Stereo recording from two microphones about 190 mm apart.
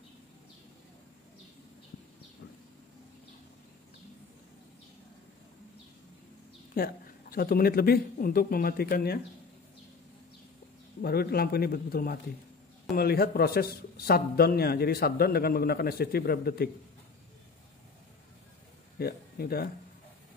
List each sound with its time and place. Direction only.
6.7 s speech: 50° left (ahead or behind)
11.0 s a man's voice: 55° left (ahead or behind)
18.9 s speech: 55° left (ahead or behind)